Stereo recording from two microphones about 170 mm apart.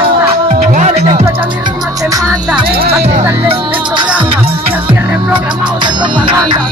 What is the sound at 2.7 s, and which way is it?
Music, 65° right (ahead or behind).